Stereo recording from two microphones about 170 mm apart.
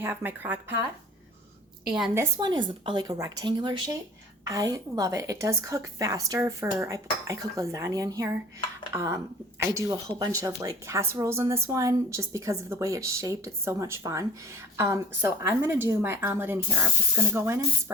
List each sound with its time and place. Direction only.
0.0 s a woman's voice: 15° right (ahead or behind)
1.8 s a woman's voice: 5° right (ahead or behind)
2.4 s a woman's voice: 25° right (ahead or behind)